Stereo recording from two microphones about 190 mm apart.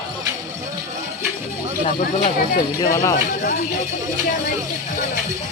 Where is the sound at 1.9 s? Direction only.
35° left (ahead or behind).